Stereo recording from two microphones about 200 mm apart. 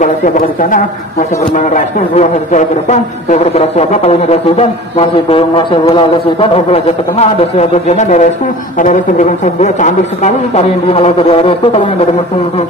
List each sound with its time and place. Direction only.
0.0 s speech: 40° left (ahead or behind)